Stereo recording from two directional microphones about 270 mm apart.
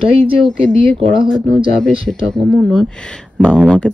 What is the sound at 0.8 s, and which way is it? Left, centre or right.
Speech, centre.